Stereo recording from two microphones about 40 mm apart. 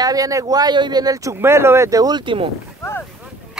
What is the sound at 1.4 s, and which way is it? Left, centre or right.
Speech, right.